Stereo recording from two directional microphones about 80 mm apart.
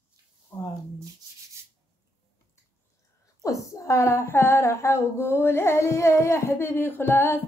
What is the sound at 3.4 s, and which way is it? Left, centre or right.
Speech, left.